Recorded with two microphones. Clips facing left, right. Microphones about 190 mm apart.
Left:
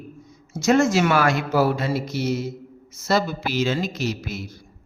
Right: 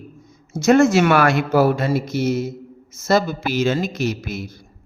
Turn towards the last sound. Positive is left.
turn(degrees=-50)  # may be behind; listen again after turning